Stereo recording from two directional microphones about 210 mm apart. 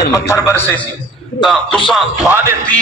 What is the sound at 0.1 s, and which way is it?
Speech, 10° left (ahead or behind).